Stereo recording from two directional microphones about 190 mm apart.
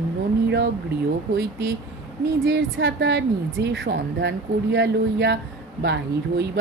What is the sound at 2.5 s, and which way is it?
A woman's voice, 75° right (ahead or behind).